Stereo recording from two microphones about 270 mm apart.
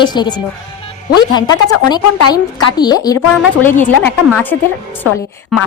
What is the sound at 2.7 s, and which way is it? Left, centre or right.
A woman's voice, centre.